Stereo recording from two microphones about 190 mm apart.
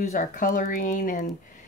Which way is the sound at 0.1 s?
40° left (ahead or behind).